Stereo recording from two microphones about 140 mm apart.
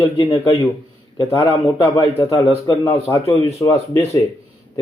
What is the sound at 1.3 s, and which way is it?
A man's voice, 20° left (ahead or behind).